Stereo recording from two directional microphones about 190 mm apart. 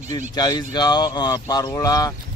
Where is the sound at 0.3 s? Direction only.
20° left (ahead or behind).